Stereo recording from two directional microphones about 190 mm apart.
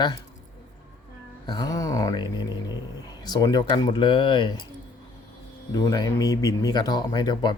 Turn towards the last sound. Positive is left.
turn(degrees=25)  # may be behind; listen again after turning